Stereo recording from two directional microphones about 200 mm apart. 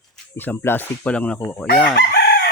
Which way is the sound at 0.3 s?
10° left (ahead or behind).